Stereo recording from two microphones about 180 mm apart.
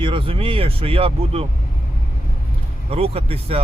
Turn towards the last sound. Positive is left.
turn(degrees=-30)  # may be behind; listen again after turning